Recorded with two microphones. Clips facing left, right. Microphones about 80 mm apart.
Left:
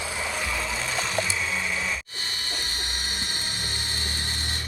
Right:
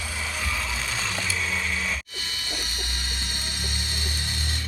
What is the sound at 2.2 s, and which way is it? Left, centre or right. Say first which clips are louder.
Vehicle: even; left.